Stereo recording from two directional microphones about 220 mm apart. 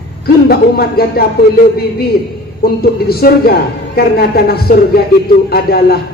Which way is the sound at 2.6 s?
45° left (ahead or behind).